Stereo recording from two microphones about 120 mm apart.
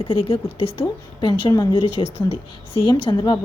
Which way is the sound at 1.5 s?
35° left (ahead or behind).